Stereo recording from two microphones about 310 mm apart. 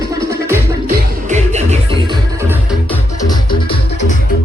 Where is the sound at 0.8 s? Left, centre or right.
Right.